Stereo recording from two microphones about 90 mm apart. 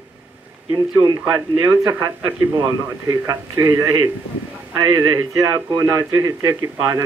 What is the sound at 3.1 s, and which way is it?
A man's voice, 40° right (ahead or behind).